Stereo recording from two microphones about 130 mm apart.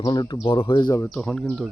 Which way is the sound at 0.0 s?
35° left (ahead or behind).